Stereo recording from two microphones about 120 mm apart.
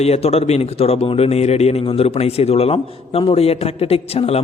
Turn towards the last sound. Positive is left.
turn(degrees=55)  # may be behind; listen again after turning